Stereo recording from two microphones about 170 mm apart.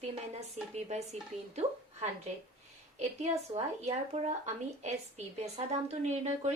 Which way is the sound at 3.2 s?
40° right (ahead or behind).